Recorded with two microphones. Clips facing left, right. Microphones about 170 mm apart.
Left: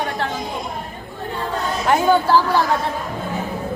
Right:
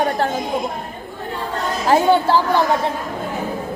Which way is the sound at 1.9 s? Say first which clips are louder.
Right 1 dB; 30° right (ahead or behind).